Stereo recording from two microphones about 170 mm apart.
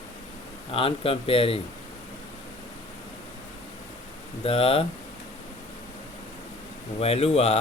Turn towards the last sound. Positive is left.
turn(degrees=35)  # may be behind; listen again after turning